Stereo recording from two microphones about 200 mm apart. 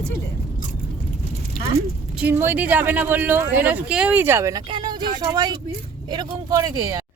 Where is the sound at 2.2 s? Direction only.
10° right (ahead or behind).